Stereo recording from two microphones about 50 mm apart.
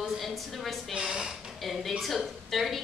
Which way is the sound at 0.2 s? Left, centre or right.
Centre.